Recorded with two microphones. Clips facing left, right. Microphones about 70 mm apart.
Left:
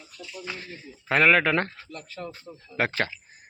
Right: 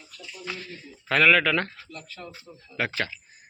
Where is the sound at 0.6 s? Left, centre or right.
Left.